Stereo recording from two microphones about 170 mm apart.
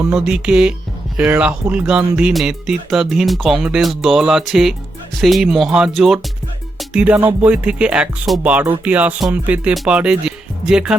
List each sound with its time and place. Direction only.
0.1 s speech: 5° right (ahead or behind)
6.7 s music: 5° right (ahead or behind)
7.4 s speech: 5° right (ahead or behind)